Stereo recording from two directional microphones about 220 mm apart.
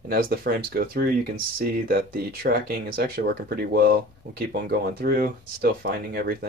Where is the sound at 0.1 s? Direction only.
45° right (ahead or behind).